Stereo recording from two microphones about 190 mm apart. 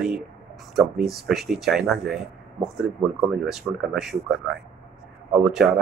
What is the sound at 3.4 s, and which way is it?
Speech, centre (ahead or behind).